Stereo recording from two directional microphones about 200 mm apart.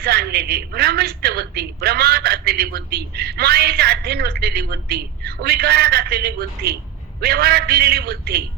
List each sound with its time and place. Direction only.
0.0 s a woman's voice: 50° right (ahead or behind)